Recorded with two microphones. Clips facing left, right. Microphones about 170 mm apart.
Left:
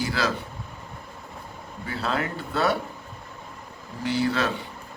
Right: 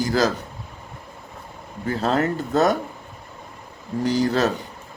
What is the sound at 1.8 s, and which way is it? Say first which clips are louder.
Speech: right 7 dB; 45° right (ahead or behind).